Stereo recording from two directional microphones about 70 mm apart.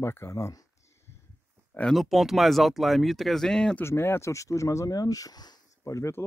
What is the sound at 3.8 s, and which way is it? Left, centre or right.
Speech, left.